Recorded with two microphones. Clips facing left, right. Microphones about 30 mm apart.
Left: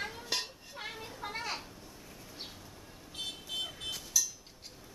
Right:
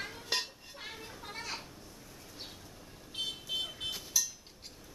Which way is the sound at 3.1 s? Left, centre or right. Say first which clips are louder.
Right 3 dB; centre.